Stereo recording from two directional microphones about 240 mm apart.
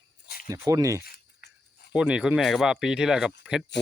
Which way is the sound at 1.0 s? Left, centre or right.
Left.